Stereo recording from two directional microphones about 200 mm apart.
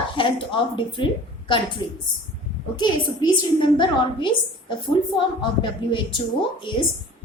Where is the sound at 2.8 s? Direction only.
25° left (ahead or behind).